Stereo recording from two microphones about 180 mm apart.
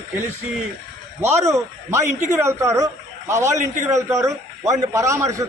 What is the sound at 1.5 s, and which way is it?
A man's voice, 15° right (ahead or behind).